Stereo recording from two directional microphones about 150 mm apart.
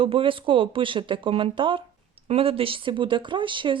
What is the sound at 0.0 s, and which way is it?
Speech, 35° right (ahead or behind).